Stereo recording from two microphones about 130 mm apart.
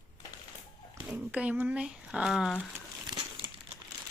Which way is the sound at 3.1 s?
35° right (ahead or behind).